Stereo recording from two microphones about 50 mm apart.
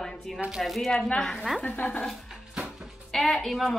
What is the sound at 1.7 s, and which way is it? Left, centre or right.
Speech, left.